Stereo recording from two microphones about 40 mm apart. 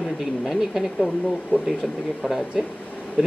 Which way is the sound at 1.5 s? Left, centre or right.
Left.